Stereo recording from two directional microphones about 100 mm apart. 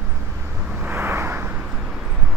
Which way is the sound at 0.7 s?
20° right (ahead or behind).